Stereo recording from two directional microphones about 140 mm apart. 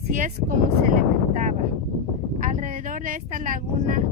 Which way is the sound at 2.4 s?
70° right (ahead or behind).